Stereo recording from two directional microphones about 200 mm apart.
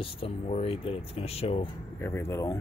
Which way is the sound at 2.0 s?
10° left (ahead or behind).